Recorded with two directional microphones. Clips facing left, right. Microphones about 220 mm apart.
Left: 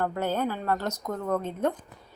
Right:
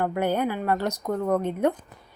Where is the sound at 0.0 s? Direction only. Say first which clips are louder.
Right 3 dB; 15° right (ahead or behind).